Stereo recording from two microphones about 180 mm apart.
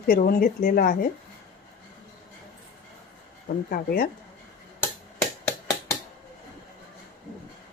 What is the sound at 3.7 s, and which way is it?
Speech, 55° left (ahead or behind).